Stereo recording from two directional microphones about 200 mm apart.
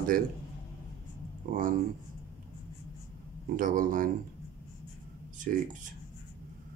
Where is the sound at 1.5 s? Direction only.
45° right (ahead or behind).